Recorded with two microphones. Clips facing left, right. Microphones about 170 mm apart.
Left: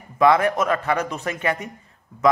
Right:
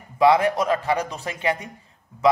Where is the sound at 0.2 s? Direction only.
15° right (ahead or behind).